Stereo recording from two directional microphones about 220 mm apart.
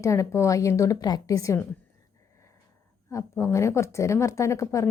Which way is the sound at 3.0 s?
10° left (ahead or behind).